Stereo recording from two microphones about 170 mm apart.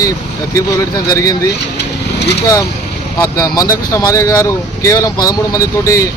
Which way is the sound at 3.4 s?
20° left (ahead or behind).